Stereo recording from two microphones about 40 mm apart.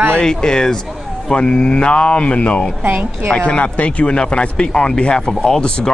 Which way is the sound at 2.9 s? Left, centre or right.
Right.